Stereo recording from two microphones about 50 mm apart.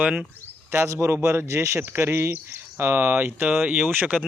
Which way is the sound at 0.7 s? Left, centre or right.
Right.